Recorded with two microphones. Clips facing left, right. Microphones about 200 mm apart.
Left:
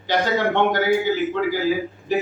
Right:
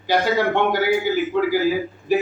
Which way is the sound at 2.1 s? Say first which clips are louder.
Right 3 dB; 10° right (ahead or behind).